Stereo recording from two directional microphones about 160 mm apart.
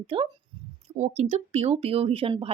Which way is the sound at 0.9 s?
45° right (ahead or behind).